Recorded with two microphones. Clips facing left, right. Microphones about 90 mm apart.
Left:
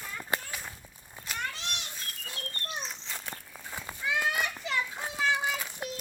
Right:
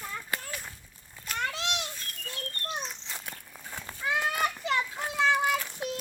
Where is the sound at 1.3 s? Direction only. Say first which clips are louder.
Right 5 dB; 90° right.